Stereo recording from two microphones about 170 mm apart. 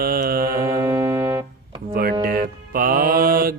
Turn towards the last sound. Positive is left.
turn(degrees=-60)  # may be behind; listen again after turning